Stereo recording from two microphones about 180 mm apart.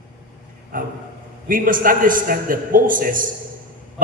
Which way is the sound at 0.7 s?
50° right (ahead or behind).